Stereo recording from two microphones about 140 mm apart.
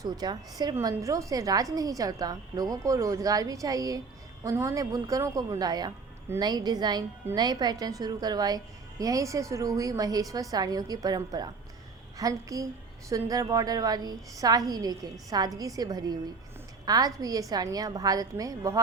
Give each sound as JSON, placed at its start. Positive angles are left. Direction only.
{"t": 0.0, "sound": "a woman's voice", "side_deg": -30}